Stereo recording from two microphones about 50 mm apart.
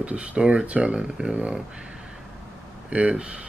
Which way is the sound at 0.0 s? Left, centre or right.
Right.